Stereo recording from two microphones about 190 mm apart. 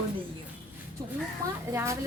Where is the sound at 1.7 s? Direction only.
15° right (ahead or behind).